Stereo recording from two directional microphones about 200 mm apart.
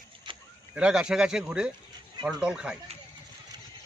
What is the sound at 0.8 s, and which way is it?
Speech, 5° right (ahead or behind).